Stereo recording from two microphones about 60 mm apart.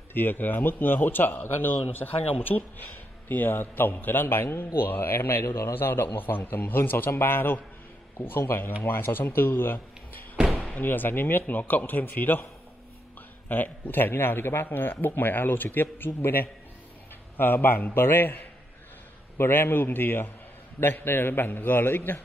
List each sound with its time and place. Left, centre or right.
0.1 s a man's voice: left
10.3 s slam: centre
10.8 s a man's voice: left
13.5 s a man's voice: left